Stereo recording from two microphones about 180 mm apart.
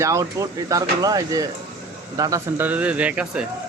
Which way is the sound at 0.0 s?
15° right (ahead or behind).